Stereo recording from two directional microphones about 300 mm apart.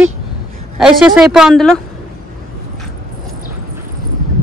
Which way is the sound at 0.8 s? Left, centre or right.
Centre.